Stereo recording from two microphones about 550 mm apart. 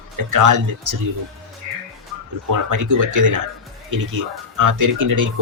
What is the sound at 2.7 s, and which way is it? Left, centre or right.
Speech, right.